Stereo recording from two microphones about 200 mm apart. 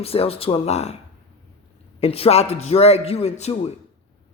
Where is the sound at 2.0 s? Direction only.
30° left (ahead or behind).